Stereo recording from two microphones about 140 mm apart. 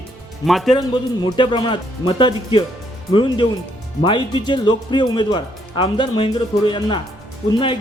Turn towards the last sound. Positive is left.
turn(degrees=40)  # may be behind; listen again after turning